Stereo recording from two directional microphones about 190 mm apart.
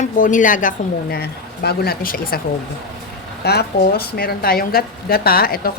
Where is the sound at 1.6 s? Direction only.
55° left (ahead or behind).